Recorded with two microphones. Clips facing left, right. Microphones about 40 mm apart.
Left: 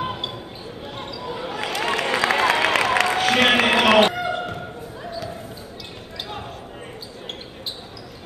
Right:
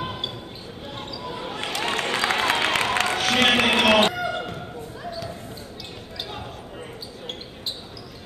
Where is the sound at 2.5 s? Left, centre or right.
Left.